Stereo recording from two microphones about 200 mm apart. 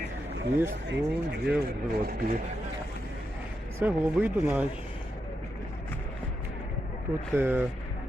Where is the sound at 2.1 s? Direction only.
40° right (ahead or behind).